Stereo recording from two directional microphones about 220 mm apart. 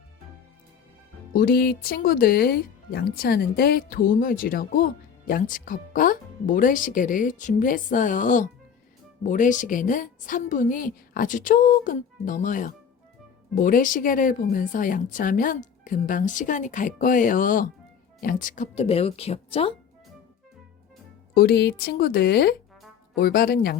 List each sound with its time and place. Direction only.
1.3 s speech: 40° left (ahead or behind); by 19.7 s 25° left (ahead or behind)
21.3 s speech: 45° left (ahead or behind)